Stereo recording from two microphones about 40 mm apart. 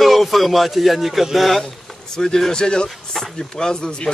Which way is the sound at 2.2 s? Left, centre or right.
Centre.